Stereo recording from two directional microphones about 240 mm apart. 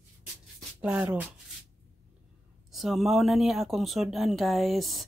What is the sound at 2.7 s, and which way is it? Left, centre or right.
Speech, centre.